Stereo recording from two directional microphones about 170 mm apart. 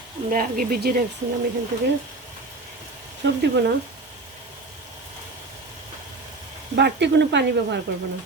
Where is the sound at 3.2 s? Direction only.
80° right.